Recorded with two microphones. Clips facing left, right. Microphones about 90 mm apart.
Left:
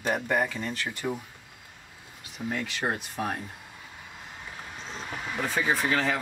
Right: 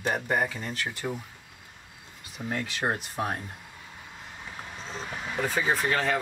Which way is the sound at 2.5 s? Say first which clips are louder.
Right 2 dB; 25° right (ahead or behind).